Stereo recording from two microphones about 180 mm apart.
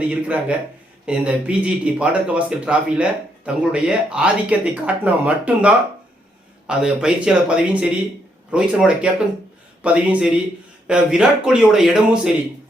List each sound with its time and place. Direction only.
0.1 s a man's voice: 5° right (ahead or behind)